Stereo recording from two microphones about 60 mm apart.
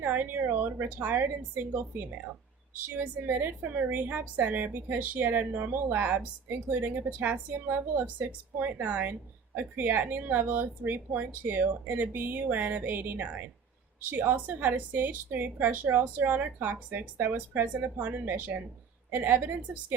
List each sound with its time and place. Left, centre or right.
0.0 s a woman's voice: right